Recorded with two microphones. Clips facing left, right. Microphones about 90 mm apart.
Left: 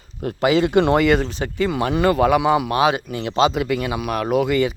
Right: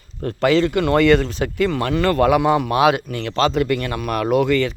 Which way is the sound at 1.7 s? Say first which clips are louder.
Left 1 dB; 15° left (ahead or behind).